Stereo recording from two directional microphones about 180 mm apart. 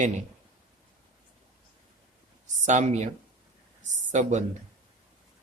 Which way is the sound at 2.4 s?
40° right (ahead or behind).